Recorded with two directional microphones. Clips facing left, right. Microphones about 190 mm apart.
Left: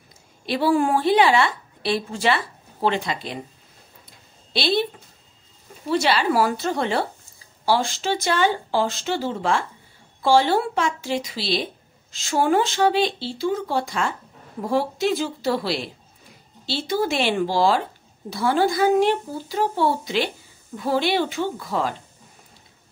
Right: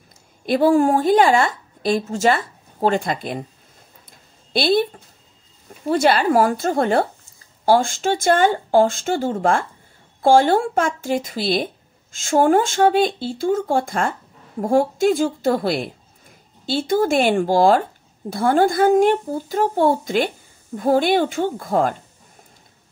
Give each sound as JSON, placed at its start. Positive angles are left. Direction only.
{"t": 0.5, "sound": "speech", "side_deg": -45}
{"t": 4.5, "sound": "speech", "side_deg": -50}
{"t": 5.9, "sound": "speech", "side_deg": -50}